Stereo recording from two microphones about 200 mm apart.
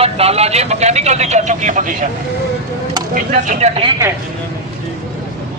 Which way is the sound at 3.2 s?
40° right (ahead or behind).